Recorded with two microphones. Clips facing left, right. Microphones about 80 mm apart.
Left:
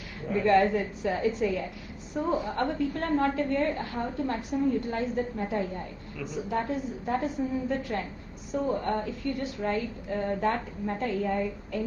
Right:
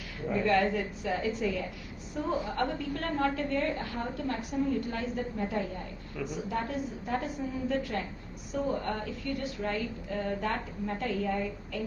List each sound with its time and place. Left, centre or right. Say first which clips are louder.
0.4 s a woman's voice: left 5 dB; left
8.6 s a woman's voice: left 5 dB; left